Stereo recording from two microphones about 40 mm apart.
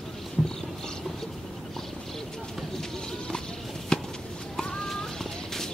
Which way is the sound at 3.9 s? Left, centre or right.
Centre.